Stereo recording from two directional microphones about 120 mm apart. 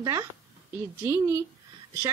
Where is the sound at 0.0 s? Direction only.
25° right (ahead or behind).